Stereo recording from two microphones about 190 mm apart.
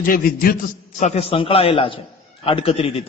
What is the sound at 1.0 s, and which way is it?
A man's voice, 35° left (ahead or behind).